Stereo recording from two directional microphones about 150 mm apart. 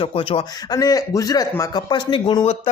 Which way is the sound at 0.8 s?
25° left (ahead or behind).